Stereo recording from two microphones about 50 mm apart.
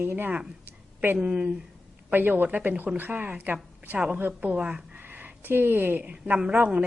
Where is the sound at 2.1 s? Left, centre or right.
Right.